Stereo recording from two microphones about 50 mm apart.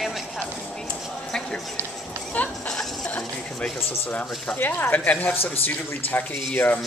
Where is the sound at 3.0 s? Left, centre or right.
Left.